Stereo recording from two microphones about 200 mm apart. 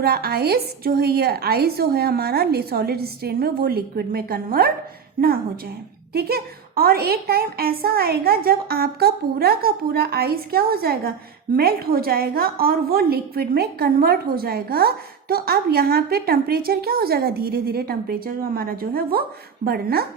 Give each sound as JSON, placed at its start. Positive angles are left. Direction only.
{"t": 0.0, "sound": "a woman's voice", "side_deg": -50}
{"t": 6.1, "sound": "a woman's voice", "side_deg": -50}